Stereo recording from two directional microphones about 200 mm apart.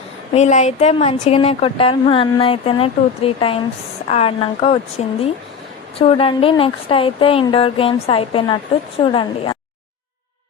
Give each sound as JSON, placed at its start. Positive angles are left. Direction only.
{"t": 0.3, "sound": "speech", "side_deg": 35}